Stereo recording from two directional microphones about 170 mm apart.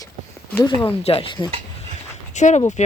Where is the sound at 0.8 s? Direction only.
35° left (ahead or behind).